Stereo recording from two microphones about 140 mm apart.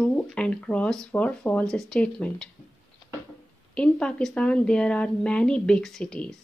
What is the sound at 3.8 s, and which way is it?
Speech, 10° left (ahead or behind).